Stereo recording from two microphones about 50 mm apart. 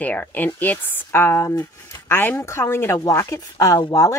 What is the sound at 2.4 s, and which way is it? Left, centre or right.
Speech, left.